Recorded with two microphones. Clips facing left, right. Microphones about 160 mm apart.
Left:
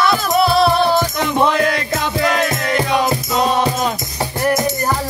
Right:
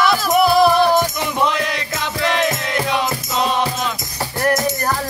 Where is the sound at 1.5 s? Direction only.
50° left (ahead or behind).